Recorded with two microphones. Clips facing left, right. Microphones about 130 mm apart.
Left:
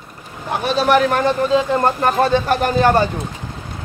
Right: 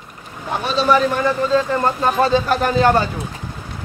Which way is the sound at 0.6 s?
65° left (ahead or behind).